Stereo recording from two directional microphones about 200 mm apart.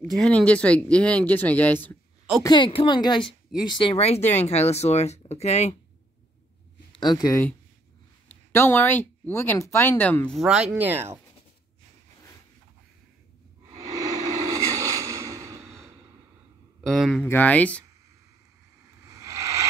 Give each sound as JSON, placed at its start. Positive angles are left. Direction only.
{"t": 0.2, "sound": "speech", "side_deg": 5}
{"t": 2.4, "sound": "speech", "side_deg": 25}
{"t": 6.9, "sound": "speech", "side_deg": 20}
{"t": 14.5, "sound": "a sound", "side_deg": -15}
{"t": 16.8, "sound": "speech", "side_deg": 0}
{"t": 19.0, "sound": "a sound", "side_deg": -15}